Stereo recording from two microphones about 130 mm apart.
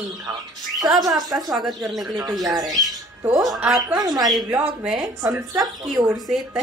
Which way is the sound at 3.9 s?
30° right (ahead or behind).